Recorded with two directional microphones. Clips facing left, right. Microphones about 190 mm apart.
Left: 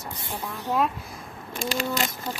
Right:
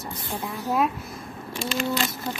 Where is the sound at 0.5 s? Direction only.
10° right (ahead or behind).